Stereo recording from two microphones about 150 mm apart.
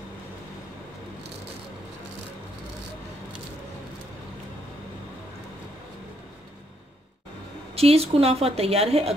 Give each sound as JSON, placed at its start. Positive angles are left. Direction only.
{"t": 7.7, "sound": "a woman's voice", "side_deg": -40}